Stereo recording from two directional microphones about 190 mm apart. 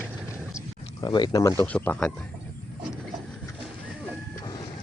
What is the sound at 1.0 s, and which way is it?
Speech, 20° left (ahead or behind).